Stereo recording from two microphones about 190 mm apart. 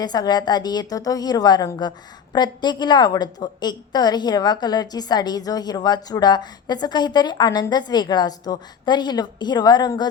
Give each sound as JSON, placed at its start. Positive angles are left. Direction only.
{"t": 0.0, "sound": "a woman's voice", "side_deg": 20}